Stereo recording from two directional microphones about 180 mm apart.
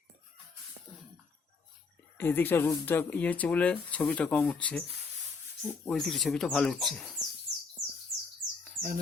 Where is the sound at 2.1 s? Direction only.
10° left (ahead or behind).